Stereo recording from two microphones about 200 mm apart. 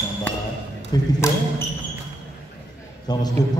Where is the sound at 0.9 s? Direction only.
10° left (ahead or behind).